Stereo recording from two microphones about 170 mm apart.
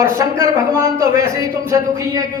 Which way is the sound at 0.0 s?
20° right (ahead or behind).